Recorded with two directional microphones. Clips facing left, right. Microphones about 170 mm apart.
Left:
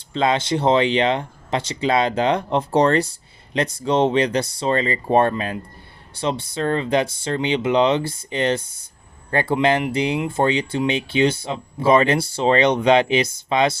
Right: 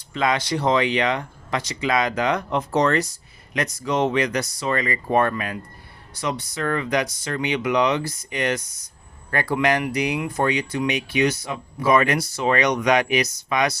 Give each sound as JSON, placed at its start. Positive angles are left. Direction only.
{"t": 0.1, "sound": "speech", "side_deg": 25}